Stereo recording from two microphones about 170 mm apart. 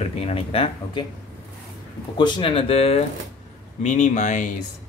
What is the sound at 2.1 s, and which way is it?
A man's voice, 25° left (ahead or behind).